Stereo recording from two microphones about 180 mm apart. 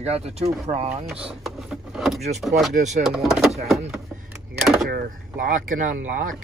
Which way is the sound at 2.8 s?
40° right (ahead or behind).